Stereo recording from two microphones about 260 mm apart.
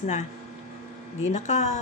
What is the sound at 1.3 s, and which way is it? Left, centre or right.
Speech, left.